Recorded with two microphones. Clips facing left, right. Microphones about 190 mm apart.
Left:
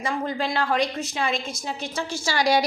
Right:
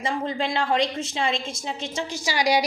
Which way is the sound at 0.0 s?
25° right (ahead or behind).